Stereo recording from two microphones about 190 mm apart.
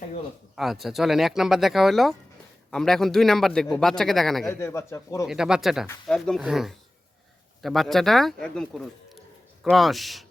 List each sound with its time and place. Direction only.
0.5 s a man's voice: centre (ahead or behind)
4.6 s speech: 15° left (ahead or behind)
5.2 s a man's voice: 5° right (ahead or behind)